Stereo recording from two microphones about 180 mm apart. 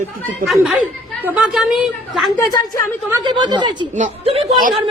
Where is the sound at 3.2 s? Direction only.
25° right (ahead or behind).